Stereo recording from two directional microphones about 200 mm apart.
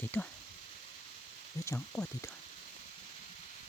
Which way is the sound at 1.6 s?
10° left (ahead or behind).